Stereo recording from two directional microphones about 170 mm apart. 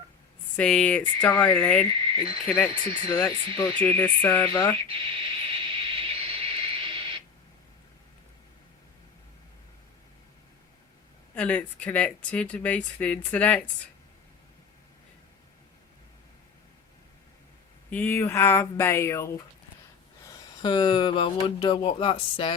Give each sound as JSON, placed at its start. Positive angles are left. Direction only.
{"t": 0.5, "sound": "speech", "side_deg": 5}
{"t": 1.9, "sound": "speech", "side_deg": -30}
{"t": 3.8, "sound": "speech", "side_deg": 10}
{"t": 4.9, "sound": "a sound", "side_deg": -30}
{"t": 11.3, "sound": "speech", "side_deg": 10}
{"t": 17.9, "sound": "speech", "side_deg": 10}
{"t": 20.2, "sound": "speech", "side_deg": 25}